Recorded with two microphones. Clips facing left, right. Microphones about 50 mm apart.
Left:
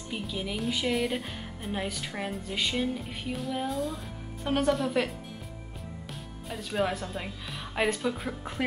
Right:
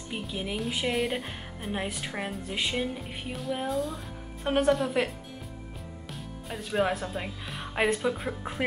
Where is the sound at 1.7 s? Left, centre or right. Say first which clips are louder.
Right 1 dB; centre.